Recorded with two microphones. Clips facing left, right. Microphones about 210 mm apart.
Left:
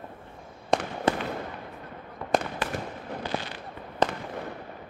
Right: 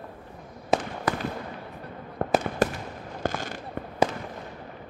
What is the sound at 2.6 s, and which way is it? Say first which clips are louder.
Fireworks: right 5 dB; 45° right (ahead or behind).